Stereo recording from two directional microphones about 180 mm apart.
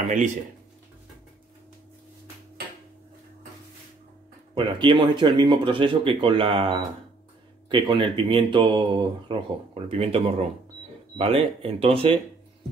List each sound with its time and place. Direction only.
4.6 s speech: 25° right (ahead or behind)